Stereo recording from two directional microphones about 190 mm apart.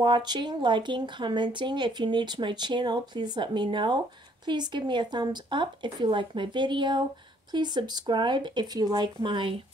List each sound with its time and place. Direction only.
0.0 s speech: 25° right (ahead or behind)